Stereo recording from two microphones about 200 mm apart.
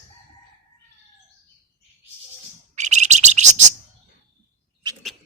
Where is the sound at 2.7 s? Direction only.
35° right (ahead or behind).